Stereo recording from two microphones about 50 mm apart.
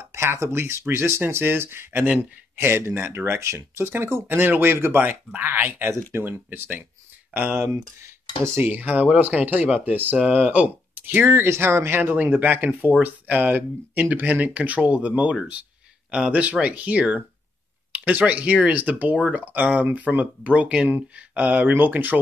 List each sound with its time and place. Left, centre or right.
0.1 s speech: right
8.6 s speech: right
10.3 s speech: right
11.0 s a sound: right
11.2 s speech: right
12.0 s speech: right